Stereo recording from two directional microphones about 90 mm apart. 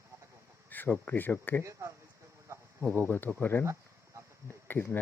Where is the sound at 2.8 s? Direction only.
20° left (ahead or behind).